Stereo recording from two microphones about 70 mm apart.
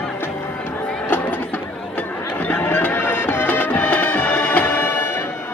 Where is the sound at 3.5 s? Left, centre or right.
Left.